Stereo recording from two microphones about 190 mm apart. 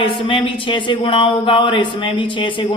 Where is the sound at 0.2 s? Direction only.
25° left (ahead or behind).